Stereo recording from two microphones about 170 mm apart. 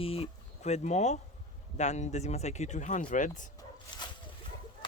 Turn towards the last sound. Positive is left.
turn(degrees=25)  # may be behind; listen again after turning